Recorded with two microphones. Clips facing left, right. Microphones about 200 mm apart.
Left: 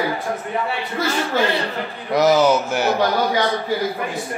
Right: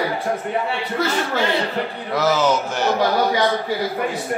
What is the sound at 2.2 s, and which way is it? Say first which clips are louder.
Speech: left 4 dB; 15° left (ahead or behind).